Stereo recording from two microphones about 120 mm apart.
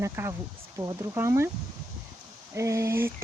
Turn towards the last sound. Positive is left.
turn(degrees=-20)  # may be behind; listen again after turning